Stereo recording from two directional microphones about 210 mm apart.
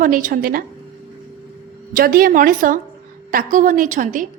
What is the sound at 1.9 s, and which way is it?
A woman's voice, 45° right (ahead or behind).